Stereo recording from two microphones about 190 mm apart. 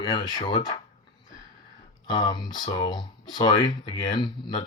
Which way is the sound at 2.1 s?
25° left (ahead or behind).